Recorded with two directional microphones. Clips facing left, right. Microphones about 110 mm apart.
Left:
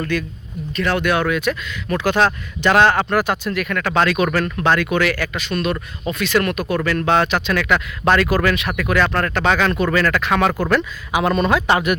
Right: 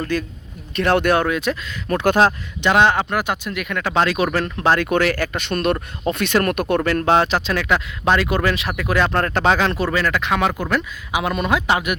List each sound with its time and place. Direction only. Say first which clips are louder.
0.1 s speech: even; 40° right (ahead or behind)
0.7 s speech: right 2 dB; 60° right (ahead or behind)
1.3 s speech: left 1 dB; 30° right (ahead or behind)
2.6 s speech: left 1 dB; 15° right (ahead or behind); by 4.9 s 30° right (ahead or behind)
4.9 s speech: right 1 dB; 45° right (ahead or behind)
5.4 s speech: right 2 dB; 55° right (ahead or behind)
6.8 s speech: right 1 dB; 40° right (ahead or behind)
7.1 s speech: even; 30° right (ahead or behind); by 11.9 s 10° right (ahead or behind)